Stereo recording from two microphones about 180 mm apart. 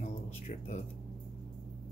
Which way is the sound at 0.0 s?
40° left (ahead or behind).